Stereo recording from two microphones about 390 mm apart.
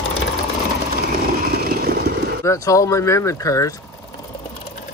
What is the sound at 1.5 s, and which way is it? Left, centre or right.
Vehicle, right.